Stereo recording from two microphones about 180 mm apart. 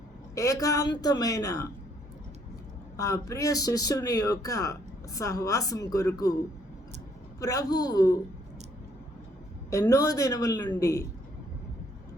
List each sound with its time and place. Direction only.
0.3 s speech: 20° left (ahead or behind)
3.0 s speech: 15° left (ahead or behind)
7.3 s speech: 20° left (ahead or behind)
9.6 s speech: 20° left (ahead or behind)